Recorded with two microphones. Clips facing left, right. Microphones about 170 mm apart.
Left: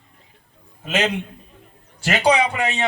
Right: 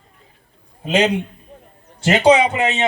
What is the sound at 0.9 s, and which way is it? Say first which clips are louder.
A man's voice: right 5 dB; 30° right (ahead or behind).